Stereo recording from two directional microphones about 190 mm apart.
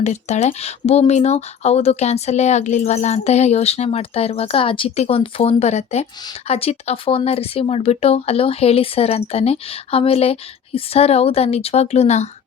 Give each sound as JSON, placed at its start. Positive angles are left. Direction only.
{"t": 0.0, "sound": "speech", "side_deg": 35}